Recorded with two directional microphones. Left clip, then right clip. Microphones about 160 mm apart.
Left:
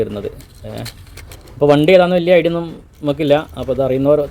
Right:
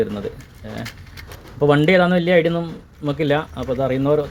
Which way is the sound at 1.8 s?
20° right (ahead or behind).